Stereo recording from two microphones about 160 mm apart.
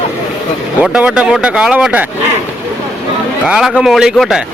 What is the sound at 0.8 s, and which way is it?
Speech, 5° right (ahead or behind).